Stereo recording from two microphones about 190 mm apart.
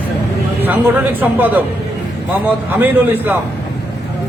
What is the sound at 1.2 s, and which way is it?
Speech, 10° right (ahead or behind).